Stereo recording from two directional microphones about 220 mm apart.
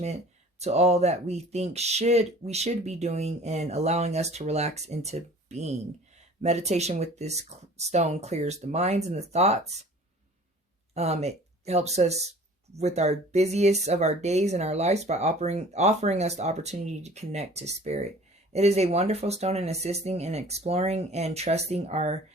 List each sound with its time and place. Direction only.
0.6 s speech: 30° right (ahead or behind)
10.9 s speech: 30° right (ahead or behind)